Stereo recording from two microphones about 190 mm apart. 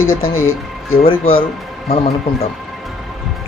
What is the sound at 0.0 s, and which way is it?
Speech, 90° left.